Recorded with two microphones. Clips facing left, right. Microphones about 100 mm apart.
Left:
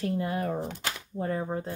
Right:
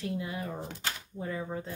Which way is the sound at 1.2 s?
45° left (ahead or behind).